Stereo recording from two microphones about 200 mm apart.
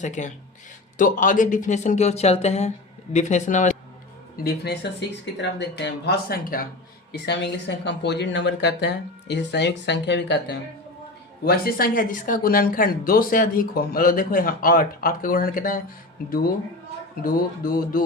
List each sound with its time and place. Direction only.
0.0 s speech: 35° left (ahead or behind)
4.4 s speech: 55° left (ahead or behind)
11.4 s speech: 45° left (ahead or behind)
17.2 s speech: 45° left (ahead or behind)